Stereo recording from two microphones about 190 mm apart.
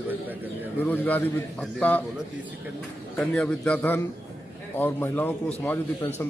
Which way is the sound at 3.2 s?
5° left (ahead or behind).